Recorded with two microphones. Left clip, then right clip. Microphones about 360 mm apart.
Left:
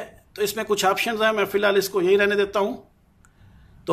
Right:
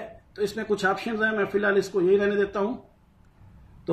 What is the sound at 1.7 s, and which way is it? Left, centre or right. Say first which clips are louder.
Speech: left 1 dB; left.